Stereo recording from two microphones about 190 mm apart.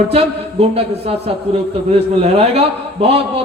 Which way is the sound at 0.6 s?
30° right (ahead or behind).